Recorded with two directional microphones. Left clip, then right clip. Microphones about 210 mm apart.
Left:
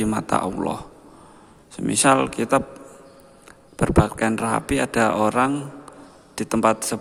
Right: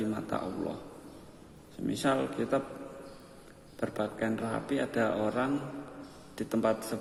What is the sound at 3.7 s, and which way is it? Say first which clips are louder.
A man's voice: left 13 dB; 35° left (ahead or behind).